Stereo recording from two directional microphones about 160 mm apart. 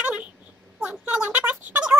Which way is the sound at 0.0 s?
10° right (ahead or behind).